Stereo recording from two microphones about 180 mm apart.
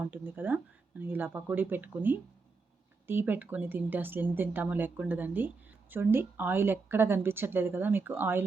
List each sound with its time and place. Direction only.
0.0 s speech: 10° right (ahead or behind)